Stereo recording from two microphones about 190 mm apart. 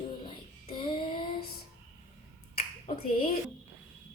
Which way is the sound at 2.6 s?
30° left (ahead or behind).